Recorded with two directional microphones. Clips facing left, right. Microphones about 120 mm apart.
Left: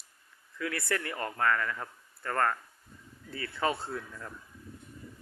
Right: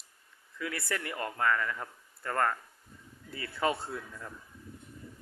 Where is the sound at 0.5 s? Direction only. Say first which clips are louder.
Left 3 dB; 5° right (ahead or behind).